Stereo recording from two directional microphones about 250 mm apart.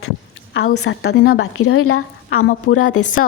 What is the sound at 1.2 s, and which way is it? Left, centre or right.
A woman's voice, left.